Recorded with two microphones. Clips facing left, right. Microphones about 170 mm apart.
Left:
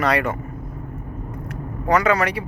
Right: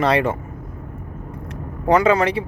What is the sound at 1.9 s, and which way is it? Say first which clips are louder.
Speech: right 3 dB; 25° right (ahead or behind).